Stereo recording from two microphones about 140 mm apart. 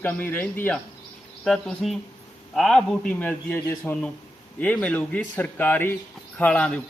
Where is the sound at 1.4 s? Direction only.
Centre (ahead or behind).